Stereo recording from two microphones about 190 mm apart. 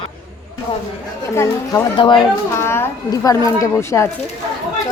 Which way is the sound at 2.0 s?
25° left (ahead or behind).